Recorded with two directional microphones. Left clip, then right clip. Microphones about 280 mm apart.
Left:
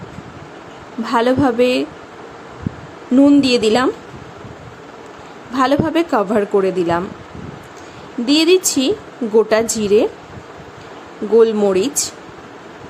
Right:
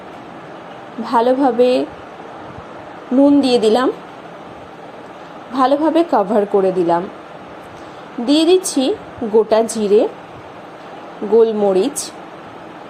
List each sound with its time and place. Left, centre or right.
1.0 s a woman's voice: centre
3.2 s a woman's voice: centre
5.5 s a woman's voice: centre
8.3 s a woman's voice: centre
11.3 s a woman's voice: centre